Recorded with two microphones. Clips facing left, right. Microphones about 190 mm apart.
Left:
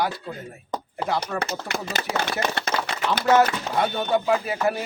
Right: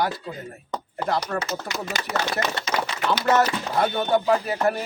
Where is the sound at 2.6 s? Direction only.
60° left (ahead or behind).